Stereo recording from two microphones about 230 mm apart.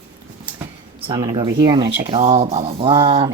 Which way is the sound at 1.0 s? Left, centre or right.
Centre.